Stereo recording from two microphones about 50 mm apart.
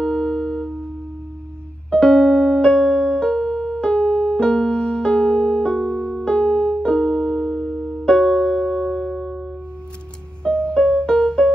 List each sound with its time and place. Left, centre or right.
0.0 s music: centre
1.9 s music: centre
6.2 s piano: centre
8.0 s music: centre
9.1 s music: centre
10.7 s music: centre